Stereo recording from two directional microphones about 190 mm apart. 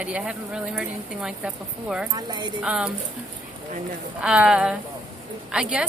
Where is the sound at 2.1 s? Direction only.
20° right (ahead or behind).